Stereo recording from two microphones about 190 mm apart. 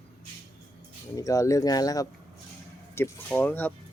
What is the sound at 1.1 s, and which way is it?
Speech, 15° left (ahead or behind).